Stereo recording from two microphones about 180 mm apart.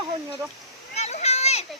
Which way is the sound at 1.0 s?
40° left (ahead or behind).